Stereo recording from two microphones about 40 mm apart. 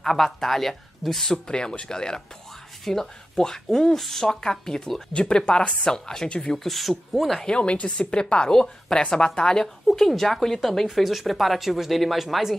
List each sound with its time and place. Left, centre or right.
0.0 s speech: centre
1.5 s a woman's voice: left; by 7.4 s centre
7.4 s a woman's voice: left
9.8 s speech: centre